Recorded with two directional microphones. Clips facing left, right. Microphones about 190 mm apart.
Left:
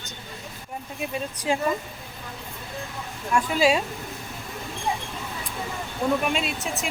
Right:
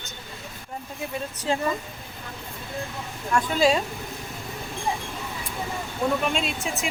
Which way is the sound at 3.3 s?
10° left (ahead or behind).